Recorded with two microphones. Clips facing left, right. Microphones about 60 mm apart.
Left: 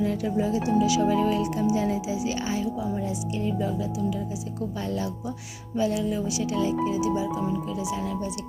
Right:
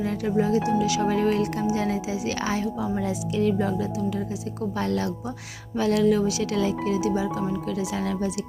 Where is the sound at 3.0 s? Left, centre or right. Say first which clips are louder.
Right 5 dB; right.